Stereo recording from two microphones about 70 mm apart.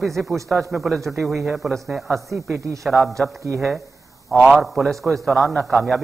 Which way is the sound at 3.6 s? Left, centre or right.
Centre.